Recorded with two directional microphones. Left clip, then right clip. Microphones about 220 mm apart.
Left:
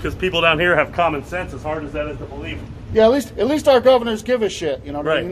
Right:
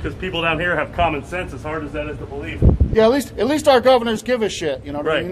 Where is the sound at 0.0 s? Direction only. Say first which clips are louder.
Left 5 dB; 45° left (ahead or behind).